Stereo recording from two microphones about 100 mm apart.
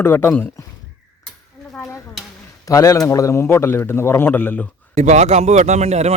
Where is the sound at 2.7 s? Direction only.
35° left (ahead or behind).